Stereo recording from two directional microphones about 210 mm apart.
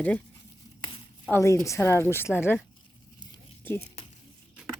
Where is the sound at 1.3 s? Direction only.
15° left (ahead or behind).